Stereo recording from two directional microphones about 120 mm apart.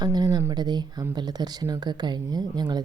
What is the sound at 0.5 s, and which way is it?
Speech, 35° right (ahead or behind).